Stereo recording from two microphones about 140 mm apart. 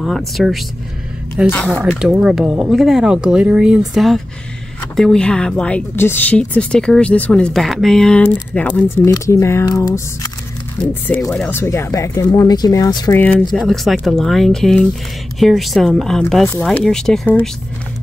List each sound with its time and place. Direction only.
0.4 s speech: centre (ahead or behind); by 10.3 s 25° left (ahead or behind)
10.9 s speech: 10° left (ahead or behind)
13.5 s speech: centre (ahead or behind)